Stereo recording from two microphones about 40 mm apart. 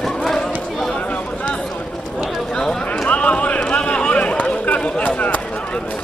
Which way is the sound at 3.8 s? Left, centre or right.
Left.